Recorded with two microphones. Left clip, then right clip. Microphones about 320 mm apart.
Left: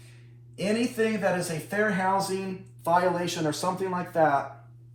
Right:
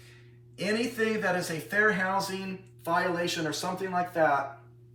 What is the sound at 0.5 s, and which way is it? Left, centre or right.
A man's voice, centre.